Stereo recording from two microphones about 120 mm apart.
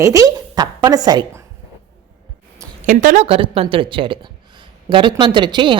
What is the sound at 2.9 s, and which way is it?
Speech, 80° right.